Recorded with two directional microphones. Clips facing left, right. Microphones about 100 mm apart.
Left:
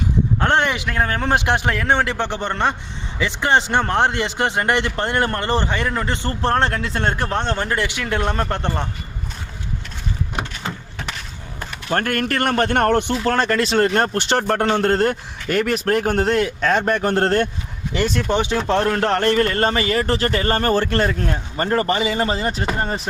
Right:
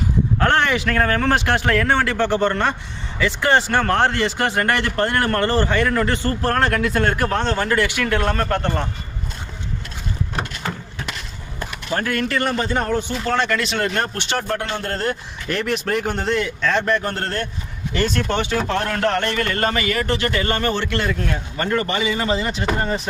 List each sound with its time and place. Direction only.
0.3 s speech: 20° left (ahead or behind)
11.9 s a man's voice: 55° left (ahead or behind)
13.2 s a man's voice: 40° left (ahead or behind)
14.8 s a man's voice: 60° left (ahead or behind)
16.2 s a man's voice: 45° left (ahead or behind)
17.2 s a man's voice: 60° left (ahead or behind)
18.1 s speech: 10° left (ahead or behind)
18.7 s a man's voice: 30° left (ahead or behind)